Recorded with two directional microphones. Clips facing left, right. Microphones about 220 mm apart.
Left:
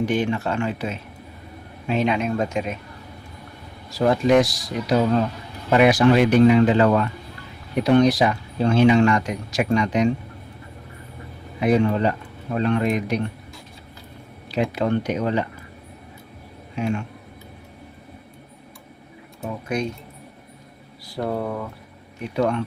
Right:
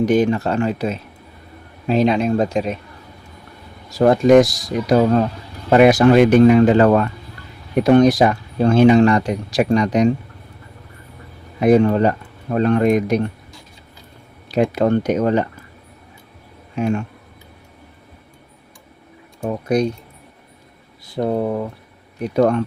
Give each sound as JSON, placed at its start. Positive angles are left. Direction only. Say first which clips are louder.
{"t": 0.0, "sound": "speech", "louder": "right 6 dB", "side_deg": -40}
{"t": 3.9, "sound": "speech", "louder": "right 6 dB", "side_deg": -50}
{"t": 11.6, "sound": "speech", "louder": "right 6 dB", "side_deg": -45}
{"t": 14.5, "sound": "speech", "louder": "right 6 dB", "side_deg": -45}
{"t": 16.7, "sound": "speech", "louder": "right 5 dB", "side_deg": -45}
{"t": 19.4, "sound": "speech", "louder": "right 8 dB", "side_deg": -40}
{"t": 21.2, "sound": "speech", "louder": "right 6 dB", "side_deg": -20}
{"t": 22.2, "sound": "speech", "louder": "right 6 dB", "side_deg": -45}